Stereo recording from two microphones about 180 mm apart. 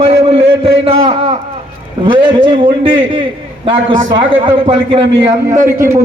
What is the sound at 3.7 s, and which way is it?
A man's voice, 30° right (ahead or behind).